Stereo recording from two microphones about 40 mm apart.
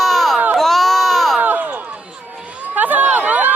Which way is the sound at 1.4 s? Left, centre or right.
Right.